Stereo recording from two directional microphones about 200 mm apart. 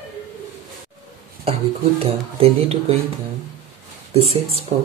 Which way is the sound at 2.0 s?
30° right (ahead or behind).